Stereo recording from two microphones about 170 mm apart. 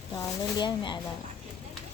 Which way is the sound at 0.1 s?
20° left (ahead or behind).